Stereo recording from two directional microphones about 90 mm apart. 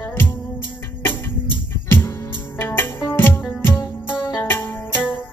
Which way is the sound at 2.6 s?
25° left (ahead or behind).